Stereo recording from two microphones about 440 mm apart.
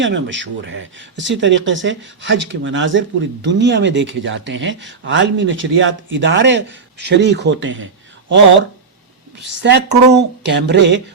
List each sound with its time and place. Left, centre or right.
0.0 s speech: right
9.4 s speech: right